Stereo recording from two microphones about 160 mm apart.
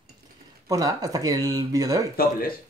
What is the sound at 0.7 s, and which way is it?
Speech, 25° right (ahead or behind).